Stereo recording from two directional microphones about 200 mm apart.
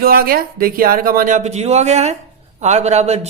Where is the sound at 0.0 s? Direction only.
50° right (ahead or behind).